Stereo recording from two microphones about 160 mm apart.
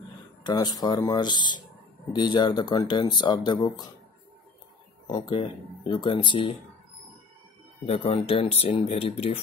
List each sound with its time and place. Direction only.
0.4 s speech: 25° left (ahead or behind)
5.0 s speech: 35° left (ahead or behind)
7.8 s speech: 40° left (ahead or behind)